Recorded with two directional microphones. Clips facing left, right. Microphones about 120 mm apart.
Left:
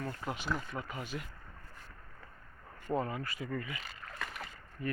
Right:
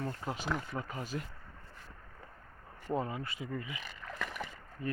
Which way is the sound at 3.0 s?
20° right (ahead or behind).